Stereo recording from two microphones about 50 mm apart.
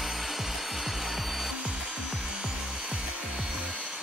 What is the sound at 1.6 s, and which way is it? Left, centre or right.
Wood, centre.